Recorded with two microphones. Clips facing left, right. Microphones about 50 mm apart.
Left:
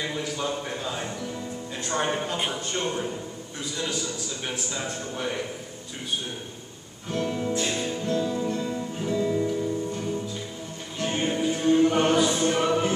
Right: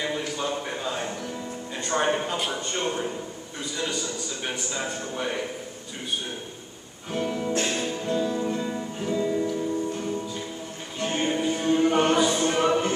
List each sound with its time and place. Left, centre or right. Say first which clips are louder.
0.0 s a sound: right 1 dB; centre
1.8 s a man's voice: right 3 dB; centre
7.1 s a man's voice: even; centre
7.5 s music: right 1 dB; right
7.9 s music: even; centre